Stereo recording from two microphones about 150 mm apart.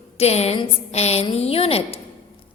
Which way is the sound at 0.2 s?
45° left (ahead or behind).